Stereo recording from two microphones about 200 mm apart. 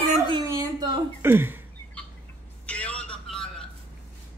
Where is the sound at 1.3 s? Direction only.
10° right (ahead or behind).